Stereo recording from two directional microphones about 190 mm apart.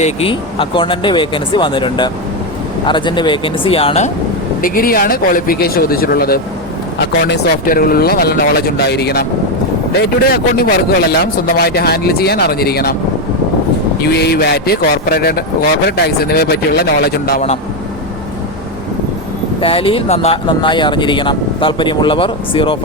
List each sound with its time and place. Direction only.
0.0 s speech: 30° left (ahead or behind)
4.6 s speech: 50° left (ahead or behind)
14.0 s speech: 60° left (ahead or behind)
19.6 s speech: 30° left (ahead or behind)